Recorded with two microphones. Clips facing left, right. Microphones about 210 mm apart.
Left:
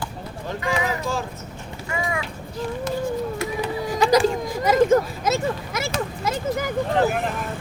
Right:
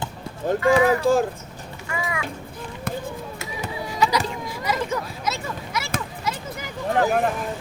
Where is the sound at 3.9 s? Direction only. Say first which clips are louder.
Left 3 dB; 50° left (ahead or behind).